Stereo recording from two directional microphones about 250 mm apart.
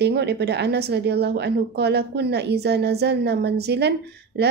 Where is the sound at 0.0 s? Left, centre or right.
Right.